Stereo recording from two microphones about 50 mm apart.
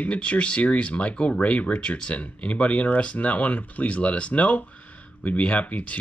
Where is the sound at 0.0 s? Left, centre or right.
Left.